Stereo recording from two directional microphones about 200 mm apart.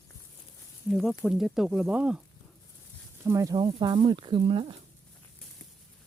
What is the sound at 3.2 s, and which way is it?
Speech, 15° right (ahead or behind).